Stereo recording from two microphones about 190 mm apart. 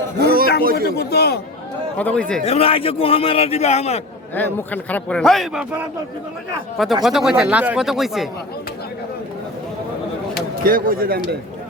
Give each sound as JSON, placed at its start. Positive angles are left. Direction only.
{"t": 0.2, "sound": "a sound", "side_deg": -55}
{"t": 0.6, "sound": "speech", "side_deg": -50}
{"t": 0.9, "sound": "a man's voice", "side_deg": 55}
{"t": 2.0, "sound": "speech", "side_deg": 5}
{"t": 2.4, "sound": "a man's voice", "side_deg": 30}
{"t": 4.4, "sound": "speech", "side_deg": 10}
{"t": 7.0, "sound": "speech", "side_deg": 0}
{"t": 10.6, "sound": "speech", "side_deg": -50}